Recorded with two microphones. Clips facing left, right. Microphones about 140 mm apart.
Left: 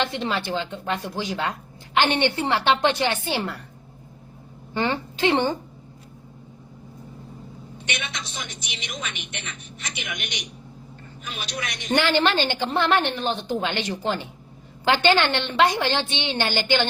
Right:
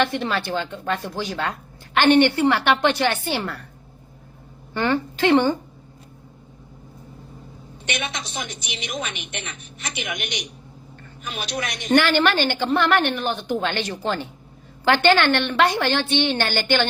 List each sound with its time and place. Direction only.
0.0 s a woman's voice: 20° left (ahead or behind)
4.7 s a woman's voice: 20° left (ahead or behind)
7.9 s a woman's voice: 45° right (ahead or behind)
11.9 s a woman's voice: 20° left (ahead or behind)